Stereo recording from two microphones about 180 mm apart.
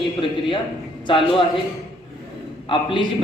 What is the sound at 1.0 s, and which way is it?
Speech, 25° left (ahead or behind).